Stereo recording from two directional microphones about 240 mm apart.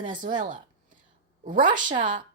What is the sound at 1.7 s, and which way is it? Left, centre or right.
Speech, centre.